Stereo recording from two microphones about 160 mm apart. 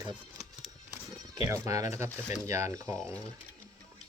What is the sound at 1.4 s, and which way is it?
Speech, 20° right (ahead or behind).